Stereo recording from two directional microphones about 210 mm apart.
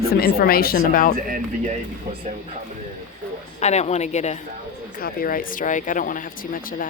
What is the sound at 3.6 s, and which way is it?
Speech, 30° left (ahead or behind).